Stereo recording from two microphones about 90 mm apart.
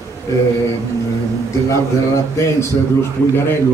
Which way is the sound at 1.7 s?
30° left (ahead or behind).